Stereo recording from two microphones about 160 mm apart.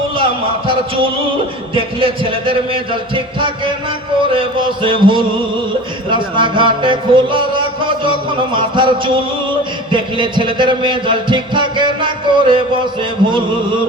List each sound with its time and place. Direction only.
1.7 s speech: 35° right (ahead or behind)
6.1 s music: 30° right (ahead or behind)
8.5 s speech: 30° right (ahead or behind)